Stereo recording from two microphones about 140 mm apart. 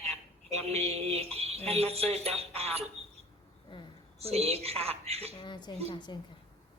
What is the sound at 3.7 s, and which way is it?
Speech, 35° left (ahead or behind).